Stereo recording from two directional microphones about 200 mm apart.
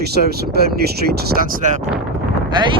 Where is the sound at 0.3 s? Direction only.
50° right (ahead or behind).